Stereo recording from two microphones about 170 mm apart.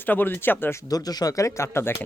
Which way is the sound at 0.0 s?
10° left (ahead or behind).